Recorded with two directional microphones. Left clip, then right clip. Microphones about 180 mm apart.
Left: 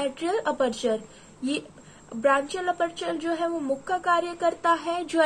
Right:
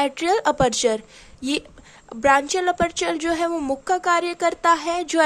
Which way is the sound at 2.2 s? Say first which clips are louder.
Right 5 dB; 40° right (ahead or behind).